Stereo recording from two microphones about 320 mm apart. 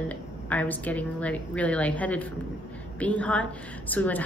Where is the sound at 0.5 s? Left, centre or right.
Centre.